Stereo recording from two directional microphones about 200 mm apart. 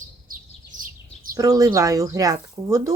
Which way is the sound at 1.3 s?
15° right (ahead or behind).